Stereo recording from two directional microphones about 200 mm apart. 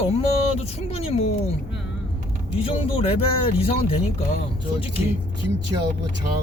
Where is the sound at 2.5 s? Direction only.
30° left (ahead or behind).